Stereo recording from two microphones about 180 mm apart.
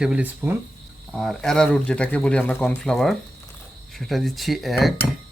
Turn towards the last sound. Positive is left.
turn(degrees=0)  # may be behind; listen again after turning